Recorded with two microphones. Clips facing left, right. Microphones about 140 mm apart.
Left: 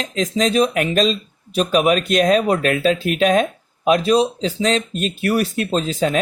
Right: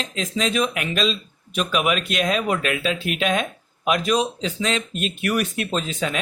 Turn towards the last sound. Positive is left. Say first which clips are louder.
# left 6 dB
turn(degrees=40)  # may be behind; listen again after turning